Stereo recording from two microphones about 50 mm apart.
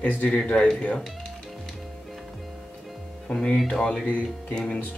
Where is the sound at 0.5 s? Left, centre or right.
Centre.